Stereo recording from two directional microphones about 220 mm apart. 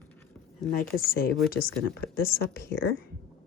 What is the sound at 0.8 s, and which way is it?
A woman's voice, 40° left (ahead or behind).